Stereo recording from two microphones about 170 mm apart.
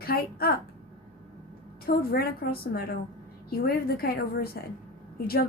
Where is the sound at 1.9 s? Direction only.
60° left (ahead or behind).